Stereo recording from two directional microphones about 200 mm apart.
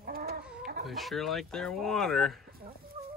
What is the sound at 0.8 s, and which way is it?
Speech, centre (ahead or behind).